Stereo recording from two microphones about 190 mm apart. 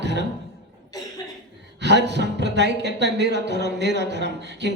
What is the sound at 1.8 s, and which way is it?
Speech, 65° right (ahead or behind).